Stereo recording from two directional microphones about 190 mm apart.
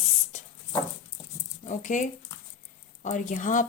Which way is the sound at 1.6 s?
40° left (ahead or behind).